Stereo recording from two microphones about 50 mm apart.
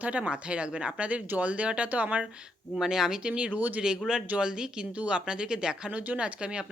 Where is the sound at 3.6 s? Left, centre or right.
Right.